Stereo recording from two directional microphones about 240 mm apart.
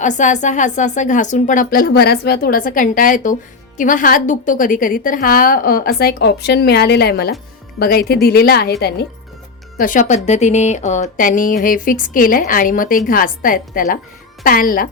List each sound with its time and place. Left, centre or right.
0.0 s a woman's voice: left
9.7 s a woman's voice: left